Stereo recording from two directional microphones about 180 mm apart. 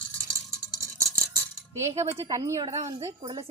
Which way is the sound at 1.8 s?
15° right (ahead or behind).